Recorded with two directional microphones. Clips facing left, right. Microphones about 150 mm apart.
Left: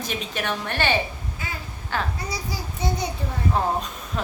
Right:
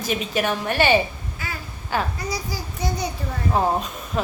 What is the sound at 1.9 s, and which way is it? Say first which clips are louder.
Speech: right 3 dB; 5° right (ahead or behind).